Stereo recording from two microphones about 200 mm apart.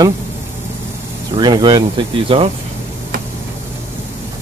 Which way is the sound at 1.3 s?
20° right (ahead or behind).